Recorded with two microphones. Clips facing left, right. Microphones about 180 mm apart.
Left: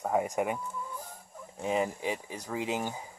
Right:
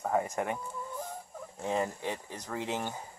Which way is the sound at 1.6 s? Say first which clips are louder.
Left 2 dB; 10° left (ahead or behind).